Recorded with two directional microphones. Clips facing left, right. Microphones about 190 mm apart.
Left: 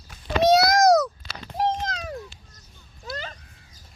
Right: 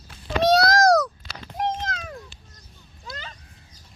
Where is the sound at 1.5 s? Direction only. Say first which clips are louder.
Left 2 dB; 35° left (ahead or behind).